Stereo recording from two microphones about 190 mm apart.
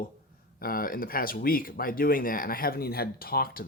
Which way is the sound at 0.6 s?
50° left (ahead or behind).